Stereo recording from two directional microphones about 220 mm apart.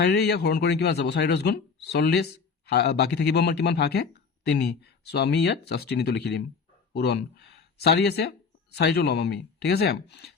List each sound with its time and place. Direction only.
0.0 s a man's voice: 50° left (ahead or behind)